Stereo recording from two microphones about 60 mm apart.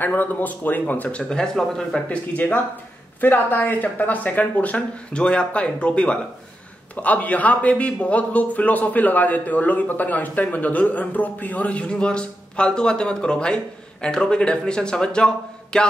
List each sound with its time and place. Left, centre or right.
0.0 s a man's voice: left
1.3 s a man's voice: centre
2.0 s a man's voice: left